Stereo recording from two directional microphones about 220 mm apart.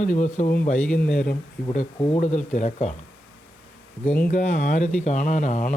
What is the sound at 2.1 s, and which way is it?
Speech, 35° left (ahead or behind).